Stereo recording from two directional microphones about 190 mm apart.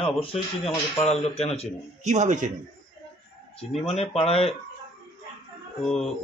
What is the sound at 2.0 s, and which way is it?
Speech, 40° right (ahead or behind).